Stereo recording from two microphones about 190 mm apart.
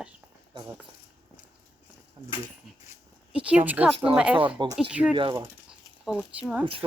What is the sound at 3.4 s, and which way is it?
Speech, 10° right (ahead or behind).